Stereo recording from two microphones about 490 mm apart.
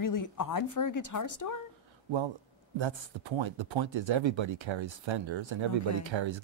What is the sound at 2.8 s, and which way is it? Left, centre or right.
Speech, right.